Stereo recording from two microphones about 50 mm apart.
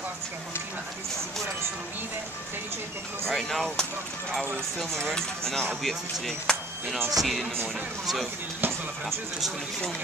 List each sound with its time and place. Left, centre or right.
3.3 s speech: centre
5.1 s speech: centre
8.5 s speech: right